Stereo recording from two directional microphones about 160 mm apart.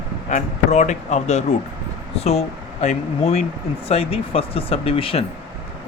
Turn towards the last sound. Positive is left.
turn(degrees=35)  # may be behind; listen again after turning